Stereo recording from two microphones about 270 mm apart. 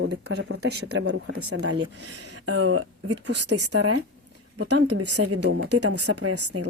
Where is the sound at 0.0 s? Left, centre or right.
Right.